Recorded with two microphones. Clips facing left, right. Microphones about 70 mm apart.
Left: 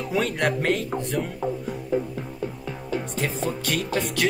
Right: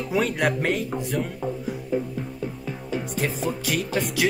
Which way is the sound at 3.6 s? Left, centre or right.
Centre.